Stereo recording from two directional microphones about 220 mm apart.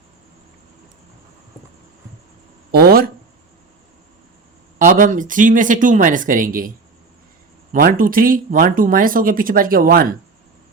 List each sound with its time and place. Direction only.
2.7 s speech: 45° right (ahead or behind)
4.9 s speech: 35° right (ahead or behind)
7.7 s speech: 40° right (ahead or behind)